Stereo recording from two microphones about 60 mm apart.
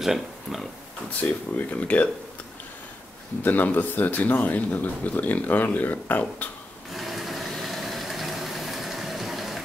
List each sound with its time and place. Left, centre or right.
0.0 s speech: centre
1.2 s speech: left
3.4 s speech: left
6.9 s a sound: centre